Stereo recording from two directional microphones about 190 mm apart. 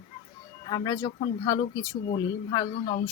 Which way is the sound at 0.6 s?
20° left (ahead or behind).